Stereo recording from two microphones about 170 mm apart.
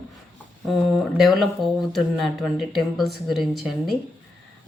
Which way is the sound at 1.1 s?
Centre (ahead or behind).